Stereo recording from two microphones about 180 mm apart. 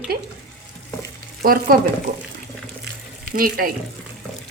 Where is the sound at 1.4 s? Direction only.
55° right (ahead or behind).